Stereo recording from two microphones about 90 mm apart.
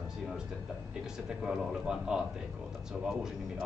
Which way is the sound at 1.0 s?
5° right (ahead or behind).